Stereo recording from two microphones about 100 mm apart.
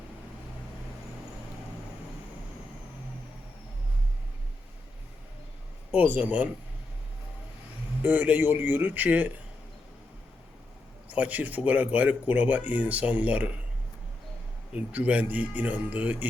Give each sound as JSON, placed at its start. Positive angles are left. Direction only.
{"t": 6.1, "sound": "speech", "side_deg": -15}
{"t": 8.0, "sound": "speech", "side_deg": -15}
{"t": 11.1, "sound": "speech", "side_deg": -15}
{"t": 14.7, "sound": "speech", "side_deg": -15}